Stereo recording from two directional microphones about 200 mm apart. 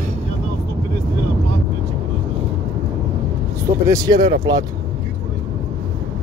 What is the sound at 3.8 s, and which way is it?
Speech, 15° right (ahead or behind).